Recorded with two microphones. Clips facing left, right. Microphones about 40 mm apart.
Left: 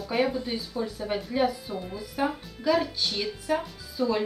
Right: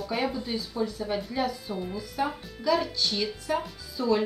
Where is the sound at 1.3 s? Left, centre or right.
Left.